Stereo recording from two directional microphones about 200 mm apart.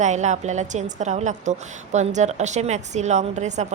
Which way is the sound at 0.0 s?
35° right (ahead or behind).